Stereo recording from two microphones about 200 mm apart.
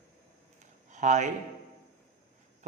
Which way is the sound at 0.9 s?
40° right (ahead or behind).